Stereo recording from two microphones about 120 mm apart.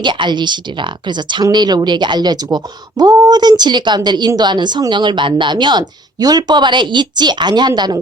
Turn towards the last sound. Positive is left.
turn(degrees=-35)  # may be behind; listen again after turning